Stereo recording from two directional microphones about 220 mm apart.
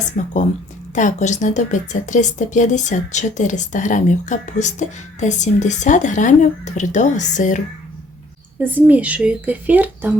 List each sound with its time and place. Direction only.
0.1 s a woman's voice: 35° left (ahead or behind)
8.5 s speech: 10° right (ahead or behind)